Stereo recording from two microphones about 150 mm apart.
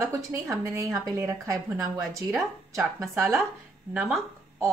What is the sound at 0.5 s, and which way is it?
A woman's voice, 20° right (ahead or behind).